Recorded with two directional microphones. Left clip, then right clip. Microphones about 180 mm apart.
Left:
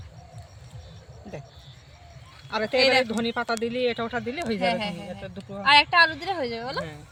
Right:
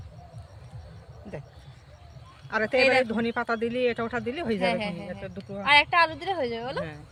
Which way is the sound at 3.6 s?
25° right (ahead or behind).